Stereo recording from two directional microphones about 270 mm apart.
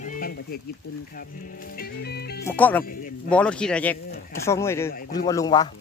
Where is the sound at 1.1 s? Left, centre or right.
Left.